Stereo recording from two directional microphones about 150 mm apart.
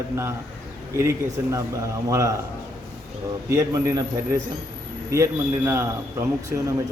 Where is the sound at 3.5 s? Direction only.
20° right (ahead or behind).